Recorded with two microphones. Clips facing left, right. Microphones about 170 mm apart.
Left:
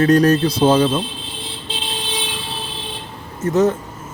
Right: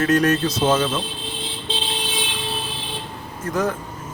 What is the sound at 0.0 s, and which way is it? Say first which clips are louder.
Speech: left 5 dB; 35° left (ahead or behind).